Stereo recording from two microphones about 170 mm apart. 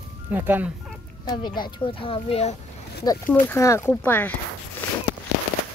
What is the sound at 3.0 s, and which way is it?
Speech, 25° left (ahead or behind).